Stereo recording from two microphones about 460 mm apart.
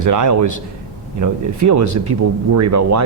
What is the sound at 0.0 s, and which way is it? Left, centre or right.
Speech, right.